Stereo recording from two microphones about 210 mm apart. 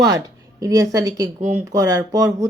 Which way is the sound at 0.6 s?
15° right (ahead or behind).